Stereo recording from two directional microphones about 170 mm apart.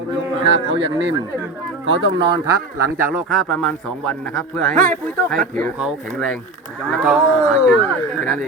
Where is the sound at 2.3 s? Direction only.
20° right (ahead or behind).